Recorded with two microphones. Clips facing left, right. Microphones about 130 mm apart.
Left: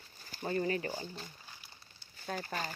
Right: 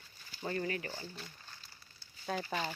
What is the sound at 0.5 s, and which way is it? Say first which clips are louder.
Speech: left 5 dB; 30° left (ahead or behind).